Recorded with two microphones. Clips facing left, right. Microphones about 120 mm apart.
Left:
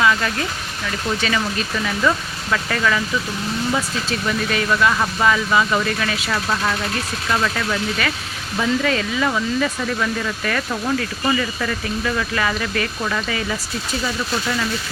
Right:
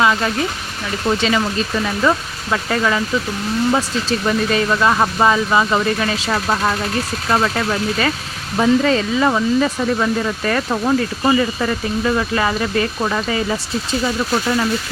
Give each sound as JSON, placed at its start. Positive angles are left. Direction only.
{"t": 0.0, "sound": "a sound", "side_deg": -25}
{"t": 1.2, "sound": "speech", "side_deg": -25}
{"t": 4.3, "sound": "speech", "side_deg": -30}